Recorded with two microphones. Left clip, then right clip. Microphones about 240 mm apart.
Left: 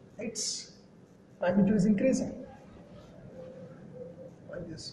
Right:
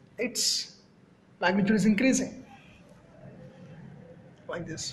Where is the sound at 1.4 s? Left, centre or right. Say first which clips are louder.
Right 2 dB; right.